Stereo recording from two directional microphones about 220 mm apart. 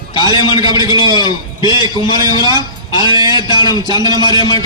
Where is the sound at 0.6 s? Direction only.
20° right (ahead or behind).